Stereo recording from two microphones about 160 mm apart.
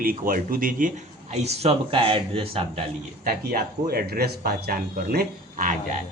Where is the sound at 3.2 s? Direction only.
65° right (ahead or behind).